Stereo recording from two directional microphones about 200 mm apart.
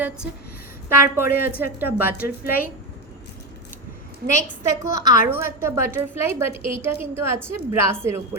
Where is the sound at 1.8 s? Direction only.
10° right (ahead or behind).